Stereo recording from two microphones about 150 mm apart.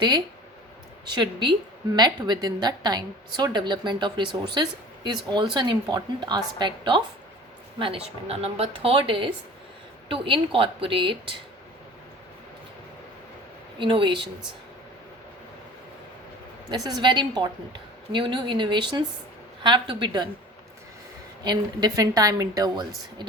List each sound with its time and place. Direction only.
1.0 s a woman's voice: 30° right (ahead or behind)
13.7 s speech: 35° right (ahead or behind)
16.6 s a woman's voice: 25° right (ahead or behind)
21.4 s a woman's voice: 25° right (ahead or behind)